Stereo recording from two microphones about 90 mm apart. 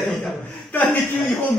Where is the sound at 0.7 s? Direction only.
20° left (ahead or behind).